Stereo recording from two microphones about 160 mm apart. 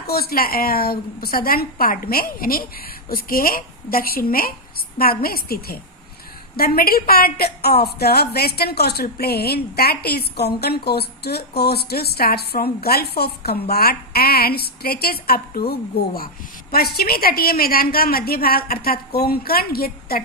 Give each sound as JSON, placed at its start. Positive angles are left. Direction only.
{"t": 0.1, "sound": "a woman's voice", "side_deg": 75}